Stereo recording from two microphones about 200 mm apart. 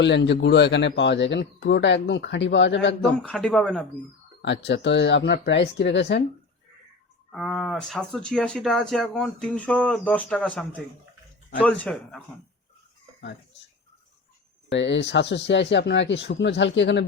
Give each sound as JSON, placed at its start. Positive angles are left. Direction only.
{"t": 0.0, "sound": "a man's voice", "side_deg": 60}
{"t": 3.2, "sound": "speech", "side_deg": 0}
{"t": 4.4, "sound": "a man's voice", "side_deg": 60}
{"t": 7.3, "sound": "speech", "side_deg": 0}
{"t": 14.7, "sound": "a man's voice", "side_deg": 65}